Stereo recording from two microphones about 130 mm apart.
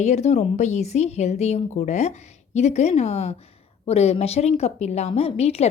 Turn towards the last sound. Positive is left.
turn(degrees=55)  # may be behind; listen again after turning